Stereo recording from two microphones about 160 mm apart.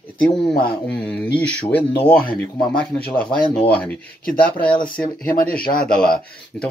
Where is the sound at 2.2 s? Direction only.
70° left (ahead or behind).